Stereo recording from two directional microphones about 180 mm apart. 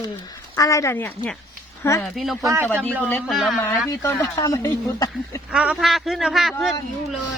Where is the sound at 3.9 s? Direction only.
20° left (ahead or behind).